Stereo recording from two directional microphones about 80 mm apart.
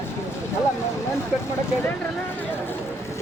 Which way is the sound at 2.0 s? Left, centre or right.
Left.